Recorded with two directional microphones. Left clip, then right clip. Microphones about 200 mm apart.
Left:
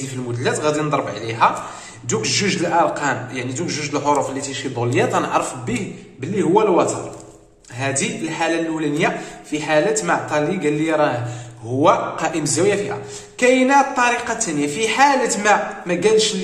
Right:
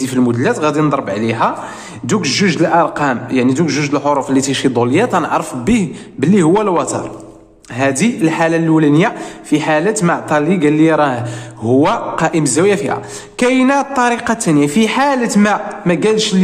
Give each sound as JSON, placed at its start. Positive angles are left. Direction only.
{"t": 0.1, "sound": "a man's voice", "side_deg": -40}
{"t": 6.3, "sound": "a man's voice", "side_deg": -55}